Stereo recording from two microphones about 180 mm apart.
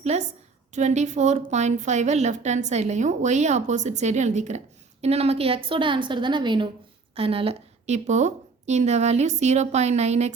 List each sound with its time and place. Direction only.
0.0 s a woman's voice: 40° right (ahead or behind)